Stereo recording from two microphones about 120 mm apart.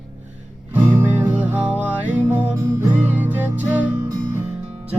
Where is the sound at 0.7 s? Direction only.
15° right (ahead or behind).